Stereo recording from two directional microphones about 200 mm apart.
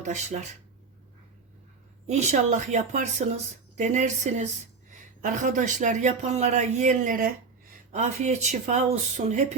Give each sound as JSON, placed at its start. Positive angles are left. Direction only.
{"t": 0.0, "sound": "speech", "side_deg": -35}
{"t": 2.0, "sound": "speech", "side_deg": -35}